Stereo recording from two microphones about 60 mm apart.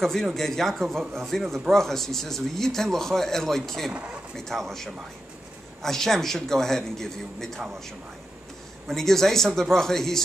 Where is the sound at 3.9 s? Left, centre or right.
Right.